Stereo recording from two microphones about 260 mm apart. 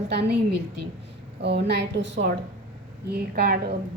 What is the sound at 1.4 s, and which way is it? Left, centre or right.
A woman's voice, right.